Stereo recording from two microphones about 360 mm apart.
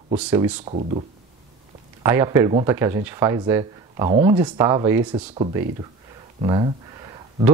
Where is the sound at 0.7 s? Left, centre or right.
Centre.